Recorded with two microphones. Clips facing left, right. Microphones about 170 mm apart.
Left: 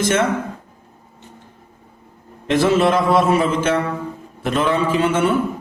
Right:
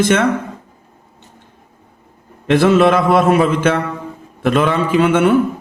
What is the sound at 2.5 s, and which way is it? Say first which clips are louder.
A man's voice: right 4 dB; 60° right (ahead or behind).